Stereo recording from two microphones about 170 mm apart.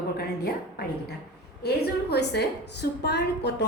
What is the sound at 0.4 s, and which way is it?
A woman's voice, 65° left (ahead or behind).